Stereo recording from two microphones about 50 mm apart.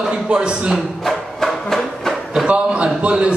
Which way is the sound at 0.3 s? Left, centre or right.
Centre.